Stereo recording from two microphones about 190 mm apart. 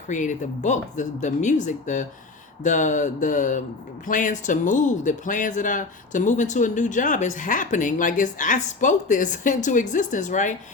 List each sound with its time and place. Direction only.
0.1 s speech: 40° left (ahead or behind)